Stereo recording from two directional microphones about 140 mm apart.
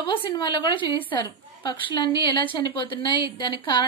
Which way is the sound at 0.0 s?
35° left (ahead or behind).